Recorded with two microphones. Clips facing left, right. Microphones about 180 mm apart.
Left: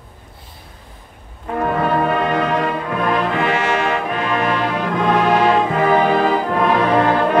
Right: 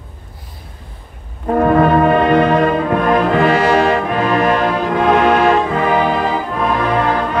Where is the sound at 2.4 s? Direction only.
35° right (ahead or behind).